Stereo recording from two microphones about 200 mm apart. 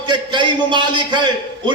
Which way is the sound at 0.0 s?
20° right (ahead or behind).